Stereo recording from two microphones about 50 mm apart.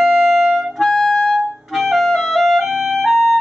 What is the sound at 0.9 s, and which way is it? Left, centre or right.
Music, centre.